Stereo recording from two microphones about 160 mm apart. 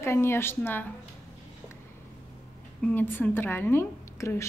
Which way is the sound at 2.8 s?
10° left (ahead or behind).